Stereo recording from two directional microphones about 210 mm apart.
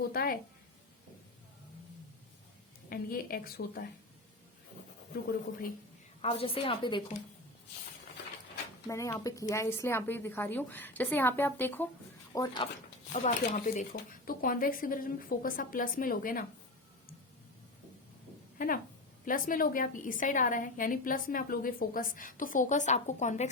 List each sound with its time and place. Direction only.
0.1 s a woman's voice: 45° left (ahead or behind)
2.9 s a woman's voice: 45° left (ahead or behind)
6.2 s a woman's voice: 25° left (ahead or behind)
8.9 s a woman's voice: 15° left (ahead or behind)
13.1 s a woman's voice: 35° left (ahead or behind)
18.5 s a woman's voice: 40° left (ahead or behind)